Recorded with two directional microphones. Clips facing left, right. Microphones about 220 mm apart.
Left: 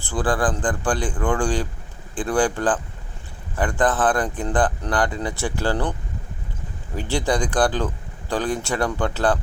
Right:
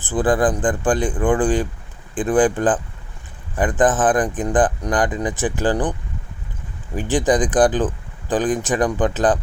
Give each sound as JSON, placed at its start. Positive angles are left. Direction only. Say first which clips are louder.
{"t": 0.1, "sound": "speech", "louder": "right 5 dB", "side_deg": -20}
{"t": 6.9, "sound": "speech", "louder": "right 5 dB", "side_deg": -15}